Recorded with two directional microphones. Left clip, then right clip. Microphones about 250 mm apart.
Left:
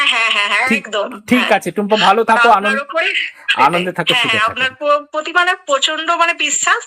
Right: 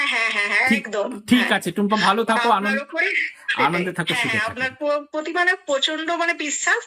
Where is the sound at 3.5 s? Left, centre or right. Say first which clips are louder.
Left 8 dB; left.